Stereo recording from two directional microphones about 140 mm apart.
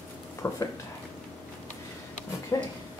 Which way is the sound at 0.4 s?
15° left (ahead or behind).